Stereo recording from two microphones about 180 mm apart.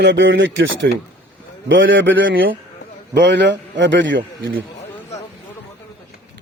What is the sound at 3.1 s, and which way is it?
A man's voice, 75° right (ahead or behind).